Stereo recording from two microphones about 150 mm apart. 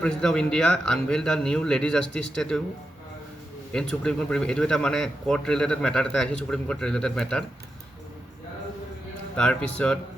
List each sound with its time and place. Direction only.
0.0 s a man's voice: 5° left (ahead or behind)
3.7 s a man's voice: 5° left (ahead or behind)
9.3 s a man's voice: 5° left (ahead or behind)